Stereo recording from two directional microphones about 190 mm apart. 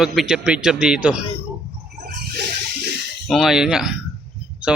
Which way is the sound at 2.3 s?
60° right (ahead or behind).